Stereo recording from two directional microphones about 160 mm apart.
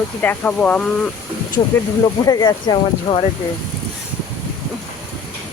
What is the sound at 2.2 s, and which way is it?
Speech, 25° left (ahead or behind).